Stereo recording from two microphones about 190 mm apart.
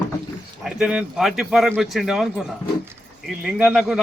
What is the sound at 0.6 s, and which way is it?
A man's voice, 5° right (ahead or behind).